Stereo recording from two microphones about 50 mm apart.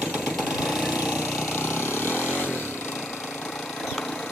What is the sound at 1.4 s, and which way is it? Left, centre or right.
Vehicle, left.